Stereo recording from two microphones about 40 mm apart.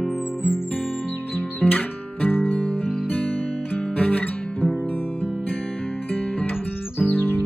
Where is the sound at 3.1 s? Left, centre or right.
Left.